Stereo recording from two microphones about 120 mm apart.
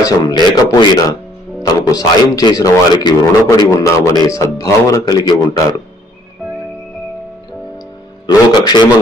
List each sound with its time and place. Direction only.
0.0 s speech: 35° left (ahead or behind)
8.3 s speech: 35° left (ahead or behind)